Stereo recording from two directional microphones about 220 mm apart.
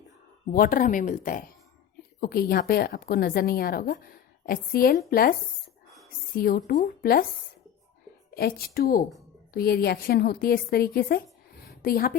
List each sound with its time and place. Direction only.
0.5 s a woman's voice: 40° left (ahead or behind)
8.4 s a woman's voice: 45° left (ahead or behind)
11.6 s a sound: 45° left (ahead or behind)